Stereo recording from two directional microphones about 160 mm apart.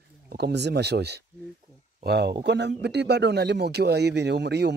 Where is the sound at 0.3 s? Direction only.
90° right.